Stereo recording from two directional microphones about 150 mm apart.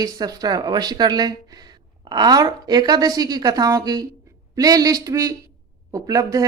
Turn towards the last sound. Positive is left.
turn(degrees=-25)  # may be behind; listen again after turning